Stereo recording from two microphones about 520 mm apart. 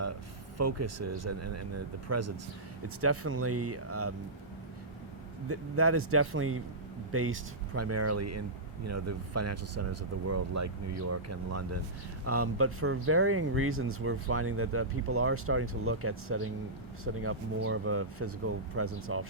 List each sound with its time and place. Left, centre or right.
0.5 s speech: right
5.5 s speech: right